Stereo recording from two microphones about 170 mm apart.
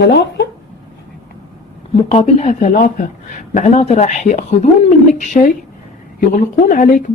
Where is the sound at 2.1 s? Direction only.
40° left (ahead or behind).